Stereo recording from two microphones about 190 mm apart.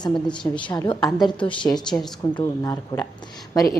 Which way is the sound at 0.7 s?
20° left (ahead or behind).